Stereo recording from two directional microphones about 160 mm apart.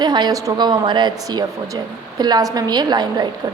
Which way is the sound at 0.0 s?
25° right (ahead or behind).